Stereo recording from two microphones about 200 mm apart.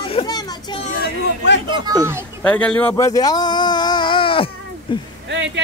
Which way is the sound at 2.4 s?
5° left (ahead or behind).